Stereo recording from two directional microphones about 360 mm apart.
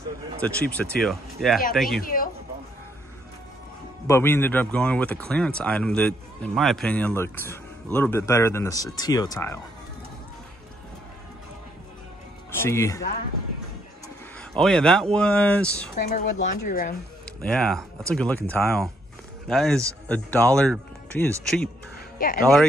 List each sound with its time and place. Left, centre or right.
0.4 s speech: centre
2.0 s speech: left
4.1 s speech: centre
12.6 s speech: centre
14.0 s a sound: centre
15.1 s speech: centre
16.0 s speech: left
17.4 s speech: centre